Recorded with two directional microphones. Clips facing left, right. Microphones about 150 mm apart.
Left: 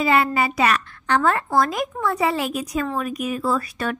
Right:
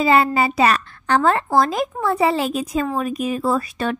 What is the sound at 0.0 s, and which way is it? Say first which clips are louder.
Speech: right 3 dB; 30° right (ahead or behind).